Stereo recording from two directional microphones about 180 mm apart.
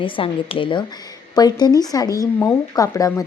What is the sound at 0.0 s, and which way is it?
A woman's voice, 30° left (ahead or behind).